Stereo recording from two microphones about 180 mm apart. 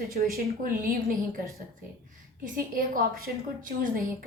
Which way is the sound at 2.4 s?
50° right (ahead or behind).